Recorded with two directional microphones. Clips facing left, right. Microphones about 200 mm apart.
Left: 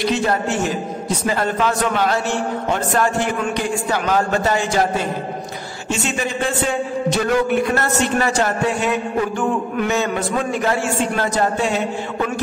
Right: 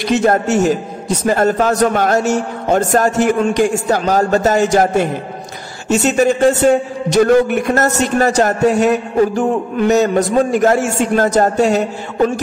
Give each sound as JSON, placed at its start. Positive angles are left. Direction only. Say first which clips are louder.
{"t": 0.1, "sound": "a man's voice", "louder": "right 6 dB", "side_deg": -45}